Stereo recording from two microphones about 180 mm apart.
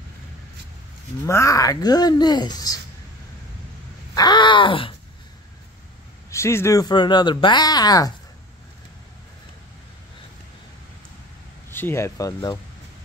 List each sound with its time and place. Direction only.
1.2 s speech: 15° left (ahead or behind)
4.1 s speech: 25° left (ahead or behind)
6.3 s speech: 15° left (ahead or behind)
11.7 s speech: 15° left (ahead or behind)